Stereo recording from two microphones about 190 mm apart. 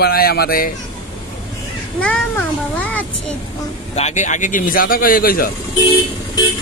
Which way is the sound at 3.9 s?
40° left (ahead or behind).